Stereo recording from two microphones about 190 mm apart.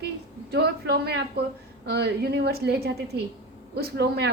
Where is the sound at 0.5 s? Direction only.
60° right (ahead or behind).